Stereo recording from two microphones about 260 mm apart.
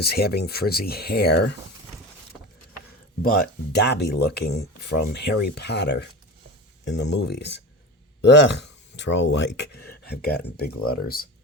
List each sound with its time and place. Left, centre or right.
0.0 s speech: left
3.2 s speech: left